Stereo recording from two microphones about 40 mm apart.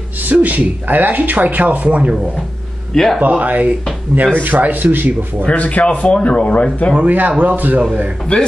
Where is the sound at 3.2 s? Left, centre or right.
Right.